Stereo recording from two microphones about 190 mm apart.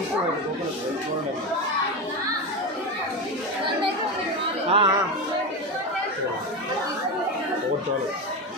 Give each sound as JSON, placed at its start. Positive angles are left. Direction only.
{"t": 4.6, "sound": "speech", "side_deg": -30}